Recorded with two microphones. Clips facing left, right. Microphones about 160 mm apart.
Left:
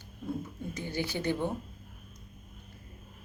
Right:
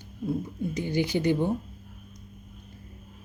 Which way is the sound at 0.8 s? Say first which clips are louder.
Right 7 dB; 15° right (ahead or behind).